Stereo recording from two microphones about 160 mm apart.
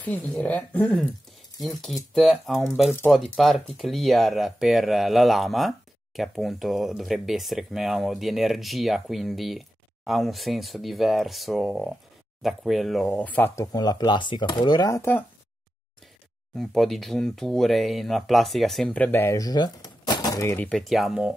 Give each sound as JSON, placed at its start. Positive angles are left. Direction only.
{"t": 0.0, "sound": "speech", "side_deg": 10}
{"t": 16.5, "sound": "speech", "side_deg": 0}
{"t": 20.9, "sound": "speech", "side_deg": 0}